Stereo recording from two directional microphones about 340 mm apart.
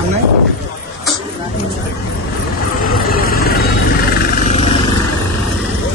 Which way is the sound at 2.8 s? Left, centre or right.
Left.